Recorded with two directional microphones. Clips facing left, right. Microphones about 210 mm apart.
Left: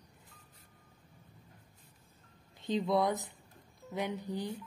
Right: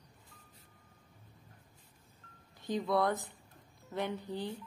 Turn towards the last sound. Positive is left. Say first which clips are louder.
# left 1 dB
turn(degrees=15)  # may be behind; listen again after turning